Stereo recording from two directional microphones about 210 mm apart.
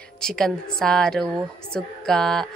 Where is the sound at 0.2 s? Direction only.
5° left (ahead or behind).